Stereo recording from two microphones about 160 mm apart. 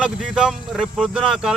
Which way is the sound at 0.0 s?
5° right (ahead or behind).